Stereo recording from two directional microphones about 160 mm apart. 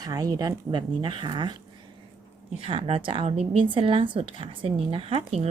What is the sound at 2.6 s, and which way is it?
Speech, 35° right (ahead or behind).